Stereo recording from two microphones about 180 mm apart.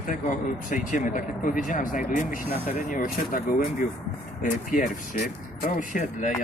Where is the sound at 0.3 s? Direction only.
45° left (ahead or behind).